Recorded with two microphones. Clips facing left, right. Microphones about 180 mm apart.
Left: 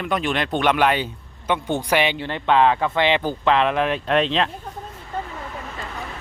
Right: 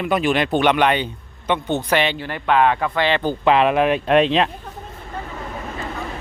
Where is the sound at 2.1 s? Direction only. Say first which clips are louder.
Even; 25° left (ahead or behind).